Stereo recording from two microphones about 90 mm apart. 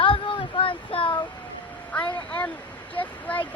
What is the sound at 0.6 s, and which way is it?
Child singing, 75° left (ahead or behind).